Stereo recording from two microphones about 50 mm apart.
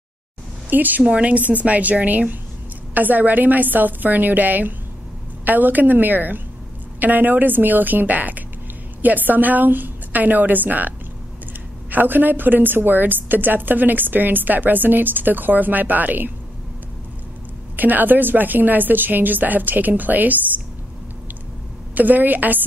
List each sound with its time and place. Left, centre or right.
0.7 s a woman's voice: right
1.0 s a woman's voice: right
11.9 s a woman's voice: right
17.7 s a woman's voice: right
21.9 s a woman's voice: right